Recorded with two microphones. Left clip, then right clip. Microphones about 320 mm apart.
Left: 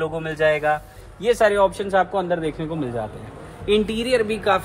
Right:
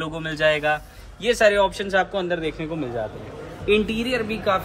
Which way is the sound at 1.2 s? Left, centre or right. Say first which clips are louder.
Left 1 dB; centre.